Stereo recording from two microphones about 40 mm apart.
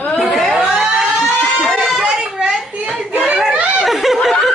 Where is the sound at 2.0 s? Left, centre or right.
Right.